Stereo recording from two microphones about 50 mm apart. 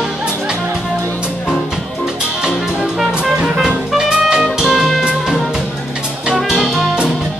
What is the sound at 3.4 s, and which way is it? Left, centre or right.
Music, centre.